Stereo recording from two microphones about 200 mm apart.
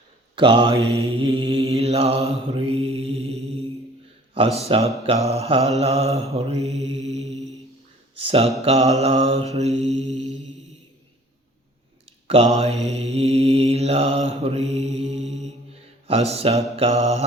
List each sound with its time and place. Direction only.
0.3 s mantra: 25° right (ahead or behind)
4.7 s mantra: 25° right (ahead or behind)
12.5 s mantra: 30° right (ahead or behind)